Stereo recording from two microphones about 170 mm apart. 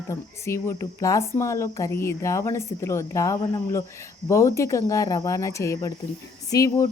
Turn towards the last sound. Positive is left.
turn(degrees=20)  # may be behind; listen again after turning